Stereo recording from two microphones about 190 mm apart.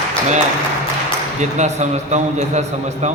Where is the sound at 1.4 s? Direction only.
35° right (ahead or behind).